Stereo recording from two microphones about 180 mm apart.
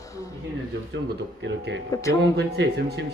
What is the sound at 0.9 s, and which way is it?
Speech, 90° right.